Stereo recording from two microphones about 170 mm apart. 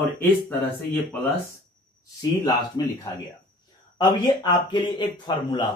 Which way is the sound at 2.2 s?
25° left (ahead or behind).